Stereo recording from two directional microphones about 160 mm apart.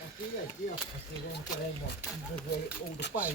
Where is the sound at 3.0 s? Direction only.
90° left.